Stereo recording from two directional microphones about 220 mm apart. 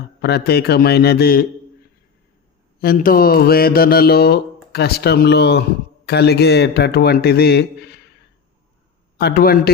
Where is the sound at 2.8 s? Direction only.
40° left (ahead or behind).